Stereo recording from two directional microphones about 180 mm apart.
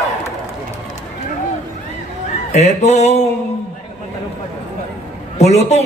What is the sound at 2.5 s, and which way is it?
Speech, 40° left (ahead or behind).